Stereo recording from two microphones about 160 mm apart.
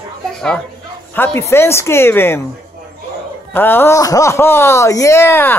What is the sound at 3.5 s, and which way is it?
Speech, 10° left (ahead or behind).